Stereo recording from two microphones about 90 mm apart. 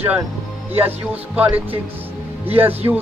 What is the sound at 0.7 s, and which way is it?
Speech, 20° right (ahead or behind).